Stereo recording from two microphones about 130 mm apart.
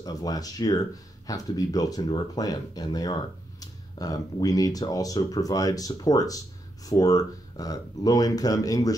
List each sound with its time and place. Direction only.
0.0 s speech: 30° left (ahead or behind)